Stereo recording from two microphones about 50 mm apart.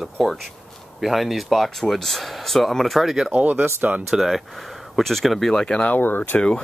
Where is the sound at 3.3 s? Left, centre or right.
Right.